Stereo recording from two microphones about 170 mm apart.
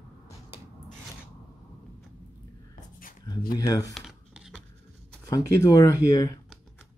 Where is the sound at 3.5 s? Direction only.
20° left (ahead or behind).